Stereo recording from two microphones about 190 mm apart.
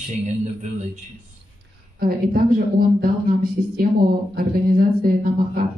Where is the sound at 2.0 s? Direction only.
50° right (ahead or behind).